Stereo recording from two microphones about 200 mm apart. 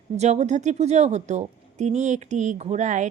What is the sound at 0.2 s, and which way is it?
A woman's voice, 35° right (ahead or behind).